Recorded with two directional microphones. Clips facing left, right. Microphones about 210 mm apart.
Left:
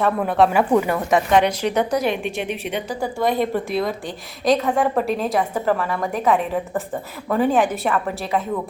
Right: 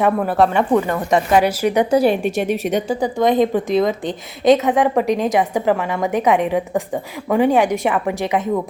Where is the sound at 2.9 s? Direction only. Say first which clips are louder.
Right 4 dB; 20° right (ahead or behind).